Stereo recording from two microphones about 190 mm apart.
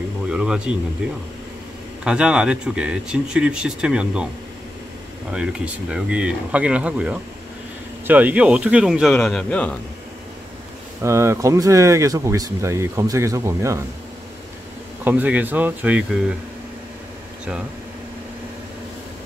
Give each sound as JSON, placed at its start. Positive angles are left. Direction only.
{"t": 0.3, "sound": "speech", "side_deg": -5}
{"t": 2.0, "sound": "speech", "side_deg": -5}
{"t": 5.3, "sound": "speech", "side_deg": -5}
{"t": 11.0, "sound": "speech", "side_deg": -15}
{"t": 15.0, "sound": "speech", "side_deg": -10}